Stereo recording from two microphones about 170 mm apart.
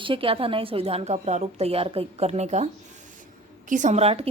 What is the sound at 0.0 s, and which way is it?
A woman's voice, 30° right (ahead or behind).